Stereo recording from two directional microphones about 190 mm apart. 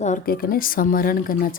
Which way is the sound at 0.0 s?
45° left (ahead or behind).